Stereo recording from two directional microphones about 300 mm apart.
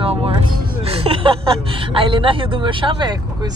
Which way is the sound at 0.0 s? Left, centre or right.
Centre.